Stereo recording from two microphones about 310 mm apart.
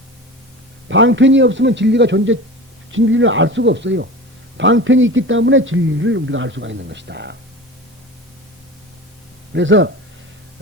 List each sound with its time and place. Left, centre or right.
0.9 s a man's voice: right
9.6 s a man's voice: right